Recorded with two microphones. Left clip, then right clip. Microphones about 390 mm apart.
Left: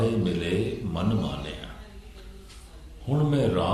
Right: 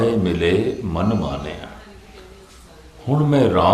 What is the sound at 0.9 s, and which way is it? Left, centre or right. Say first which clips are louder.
Speech: right 8 dB; right.